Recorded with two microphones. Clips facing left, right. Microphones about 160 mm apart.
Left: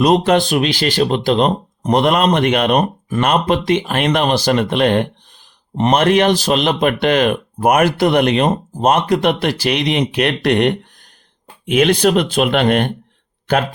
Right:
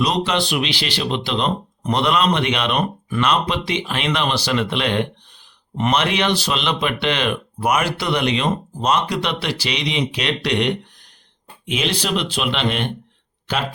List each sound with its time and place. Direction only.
0.0 s speech: 50° left (ahead or behind)